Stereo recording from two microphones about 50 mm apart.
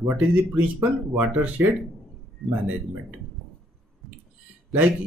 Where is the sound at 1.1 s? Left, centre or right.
Right.